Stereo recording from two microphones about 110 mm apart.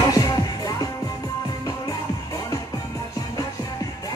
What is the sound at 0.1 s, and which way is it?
Music, 35° left (ahead or behind).